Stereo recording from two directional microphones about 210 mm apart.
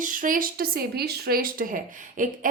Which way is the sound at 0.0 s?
40° right (ahead or behind).